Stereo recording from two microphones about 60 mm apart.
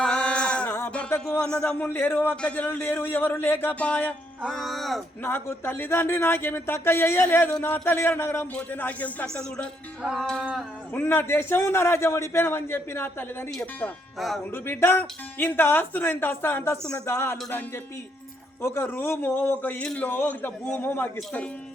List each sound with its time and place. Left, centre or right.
0.0 s a sound: centre
1.4 s music: centre
1.8 s speech: left
4.4 s speech: centre
5.2 s speech: left
8.7 s speech: left
9.2 s music: centre
10.9 s a man's voice: left
14.2 s speech: centre
14.5 s a man's voice: left
18.6 s a man's voice: left